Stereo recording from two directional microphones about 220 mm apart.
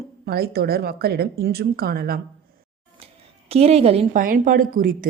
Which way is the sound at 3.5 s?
25° right (ahead or behind).